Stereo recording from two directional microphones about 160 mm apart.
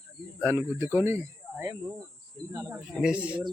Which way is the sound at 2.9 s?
5° right (ahead or behind).